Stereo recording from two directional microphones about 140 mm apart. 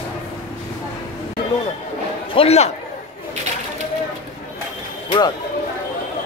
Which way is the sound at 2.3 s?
45° left (ahead or behind).